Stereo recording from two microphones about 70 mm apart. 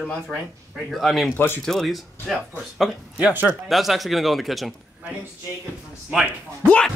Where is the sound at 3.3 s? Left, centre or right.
Right.